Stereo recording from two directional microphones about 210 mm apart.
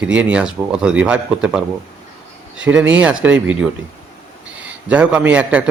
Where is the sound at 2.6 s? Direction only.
5° right (ahead or behind).